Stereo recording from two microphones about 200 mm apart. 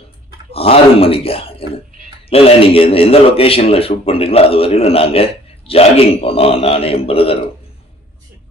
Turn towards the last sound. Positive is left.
turn(degrees=30)  # may be behind; listen again after turning